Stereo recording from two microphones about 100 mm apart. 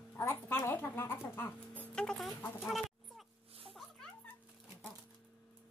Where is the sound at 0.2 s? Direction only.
25° left (ahead or behind); by 2.3 s 5° left (ahead or behind).